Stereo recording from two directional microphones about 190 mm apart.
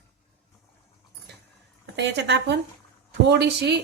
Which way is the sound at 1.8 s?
65° right (ahead or behind).